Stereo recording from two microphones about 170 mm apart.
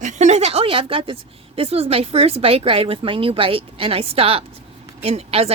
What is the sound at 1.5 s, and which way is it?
A woman's voice, 35° right (ahead or behind).